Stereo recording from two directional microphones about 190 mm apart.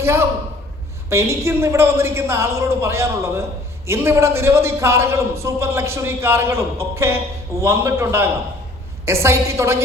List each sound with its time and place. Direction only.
0.0 s a man's voice: 15° right (ahead or behind)